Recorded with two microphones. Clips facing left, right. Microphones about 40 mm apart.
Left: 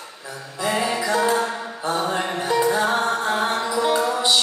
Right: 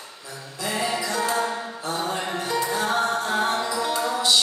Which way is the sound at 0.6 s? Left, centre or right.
Centre.